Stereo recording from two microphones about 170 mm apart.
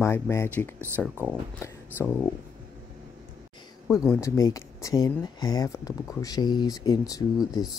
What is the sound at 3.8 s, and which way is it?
Speech, 15° left (ahead or behind).